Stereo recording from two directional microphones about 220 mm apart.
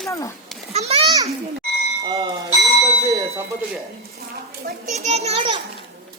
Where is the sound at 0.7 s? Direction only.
30° right (ahead or behind).